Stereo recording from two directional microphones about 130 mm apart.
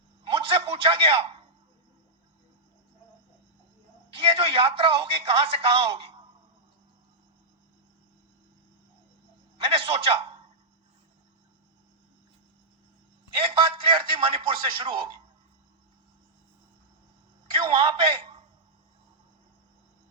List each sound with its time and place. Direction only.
0.3 s a sound: 45° right (ahead or behind)
4.1 s speech: 45° right (ahead or behind)
9.6 s a man's voice: 45° right (ahead or behind)
13.4 s speech: 40° right (ahead or behind)
17.5 s a man's voice: 40° right (ahead or behind)